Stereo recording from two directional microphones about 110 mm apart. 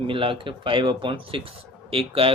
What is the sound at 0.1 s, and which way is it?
Speech, 55° right (ahead or behind).